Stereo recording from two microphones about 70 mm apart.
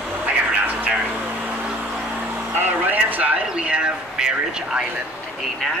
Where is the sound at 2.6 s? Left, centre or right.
Right.